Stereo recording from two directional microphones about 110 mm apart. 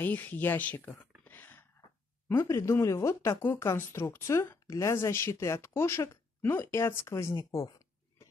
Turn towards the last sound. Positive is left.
turn(degrees=25)  # may be behind; listen again after turning